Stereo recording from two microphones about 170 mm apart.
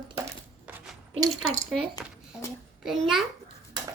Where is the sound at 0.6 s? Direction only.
Centre (ahead or behind).